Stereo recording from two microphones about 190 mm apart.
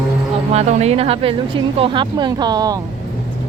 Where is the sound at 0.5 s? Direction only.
35° right (ahead or behind).